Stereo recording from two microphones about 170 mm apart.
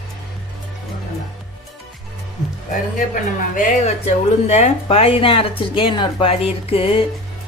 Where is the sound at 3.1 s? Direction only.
50° left (ahead or behind).